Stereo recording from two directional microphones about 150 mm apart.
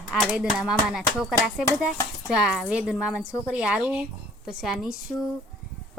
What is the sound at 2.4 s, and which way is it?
Speech, centre (ahead or behind).